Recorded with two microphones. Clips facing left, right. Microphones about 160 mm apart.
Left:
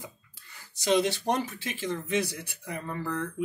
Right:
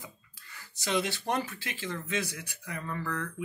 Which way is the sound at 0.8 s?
20° left (ahead or behind).